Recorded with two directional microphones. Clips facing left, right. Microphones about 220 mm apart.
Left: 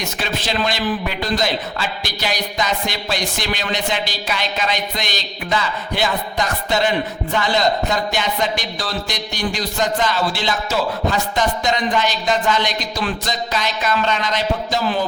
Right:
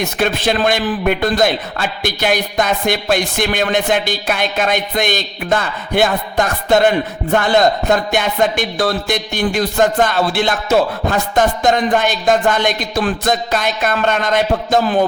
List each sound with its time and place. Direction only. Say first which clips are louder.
0.0 s a man's voice: right 8 dB; 55° right (ahead or behind)